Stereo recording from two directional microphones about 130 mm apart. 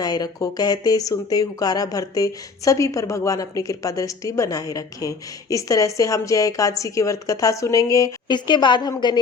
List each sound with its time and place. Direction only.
0.0 s speech: 30° left (ahead or behind)